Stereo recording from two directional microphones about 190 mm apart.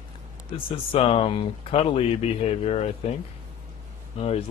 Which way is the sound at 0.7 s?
30° left (ahead or behind).